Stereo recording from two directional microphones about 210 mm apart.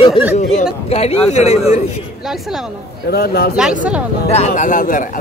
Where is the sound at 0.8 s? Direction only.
30° left (ahead or behind).